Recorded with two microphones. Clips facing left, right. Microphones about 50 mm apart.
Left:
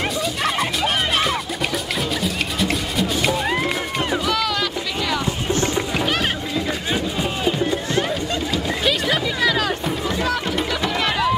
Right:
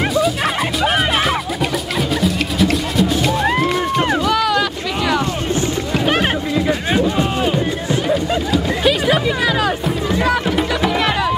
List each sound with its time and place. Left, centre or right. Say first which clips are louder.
0.1 s music: right 5 dB; centre
4.2 s boat: right 5 dB; centre
6.0 s music: right 5 dB; centre